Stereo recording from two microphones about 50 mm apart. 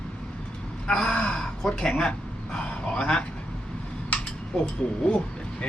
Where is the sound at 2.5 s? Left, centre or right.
Left.